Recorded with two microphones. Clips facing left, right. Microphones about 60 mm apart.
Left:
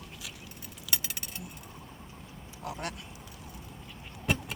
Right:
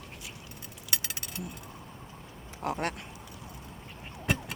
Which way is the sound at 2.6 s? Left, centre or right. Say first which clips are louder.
Right 6 dB; right.